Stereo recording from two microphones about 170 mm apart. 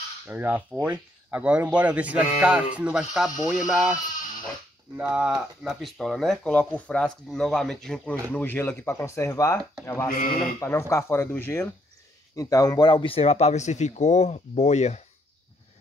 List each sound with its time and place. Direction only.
0.3 s speech: 10° right (ahead or behind); by 9.6 s 15° left (ahead or behind)
10.0 s speech: 55° left (ahead or behind)
10.6 s speech: 15° left (ahead or behind); by 15.0 s 40° left (ahead or behind)